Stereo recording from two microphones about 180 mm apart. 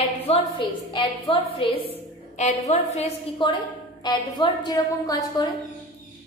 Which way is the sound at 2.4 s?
40° left (ahead or behind).